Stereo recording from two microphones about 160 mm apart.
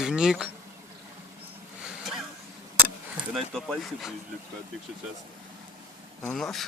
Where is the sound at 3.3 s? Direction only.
Centre (ahead or behind).